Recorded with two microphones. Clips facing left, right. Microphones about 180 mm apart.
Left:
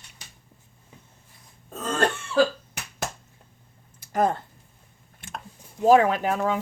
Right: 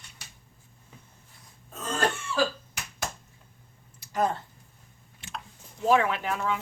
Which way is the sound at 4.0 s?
50° left (ahead or behind).